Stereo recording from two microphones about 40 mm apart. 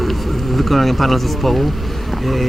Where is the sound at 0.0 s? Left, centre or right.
Centre.